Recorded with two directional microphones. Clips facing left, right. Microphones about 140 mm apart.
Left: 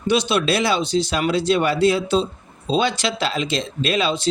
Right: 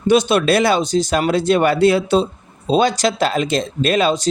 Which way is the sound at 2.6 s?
45° right (ahead or behind).